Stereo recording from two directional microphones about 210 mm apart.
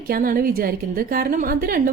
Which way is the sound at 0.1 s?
45° right (ahead or behind).